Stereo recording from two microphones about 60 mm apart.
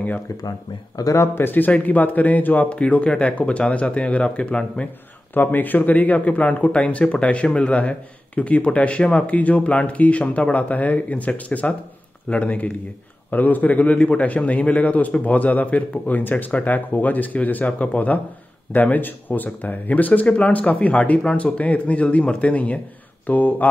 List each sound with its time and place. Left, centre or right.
0.4 s speech: left
1.1 s speech: left; by 4.8 s centre
5.3 s speech: left